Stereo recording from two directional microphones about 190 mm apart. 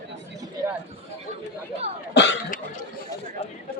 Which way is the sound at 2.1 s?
70° left (ahead or behind).